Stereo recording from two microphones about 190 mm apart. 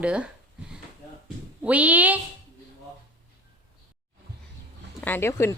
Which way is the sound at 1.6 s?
10° right (ahead or behind).